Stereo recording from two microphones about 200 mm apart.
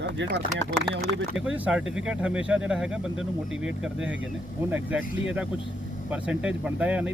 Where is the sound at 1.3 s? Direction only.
5° right (ahead or behind).